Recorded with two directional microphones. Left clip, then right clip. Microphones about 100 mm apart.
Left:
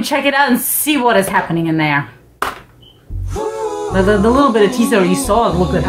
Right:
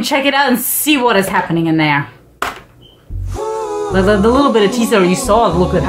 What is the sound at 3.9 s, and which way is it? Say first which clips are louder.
Speech: right 1 dB; 40° right (ahead or behind).